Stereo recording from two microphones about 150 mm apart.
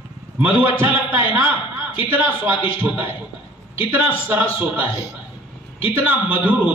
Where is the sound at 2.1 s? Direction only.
10° right (ahead or behind).